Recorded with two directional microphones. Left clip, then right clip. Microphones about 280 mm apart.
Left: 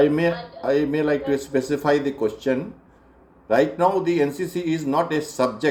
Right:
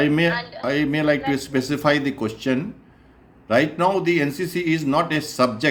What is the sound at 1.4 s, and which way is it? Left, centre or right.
Speech, right.